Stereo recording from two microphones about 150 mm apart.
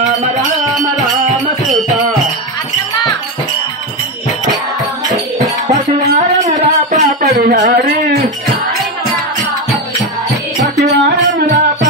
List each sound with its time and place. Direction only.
0.4 s music: centre (ahead or behind)
5.7 s music: 50° right (ahead or behind)
7.2 s music: 65° right (ahead or behind)
10.6 s music: 50° right (ahead or behind)